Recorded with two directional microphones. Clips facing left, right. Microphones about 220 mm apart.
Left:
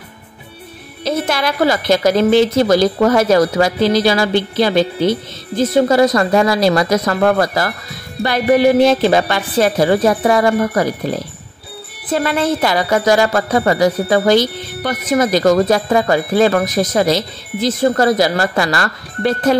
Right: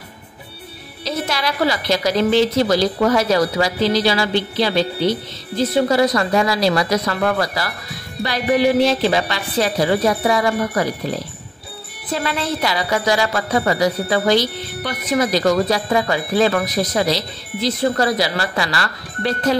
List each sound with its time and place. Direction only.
1.0 s speech: 50° left (ahead or behind)
12.1 s speech: 50° left (ahead or behind)